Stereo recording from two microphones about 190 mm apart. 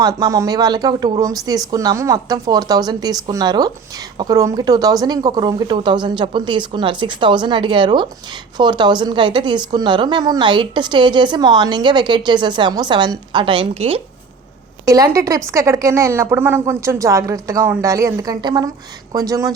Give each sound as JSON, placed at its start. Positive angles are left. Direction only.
{"t": 0.0, "sound": "a woman's voice", "side_deg": -20}
{"t": 14.8, "sound": "a woman's voice", "side_deg": -15}